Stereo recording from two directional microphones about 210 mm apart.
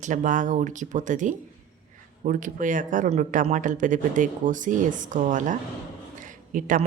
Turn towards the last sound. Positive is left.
turn(degrees=-40)  # may be behind; listen again after turning